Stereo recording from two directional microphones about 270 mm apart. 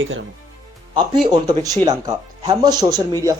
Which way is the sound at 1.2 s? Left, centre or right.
Centre.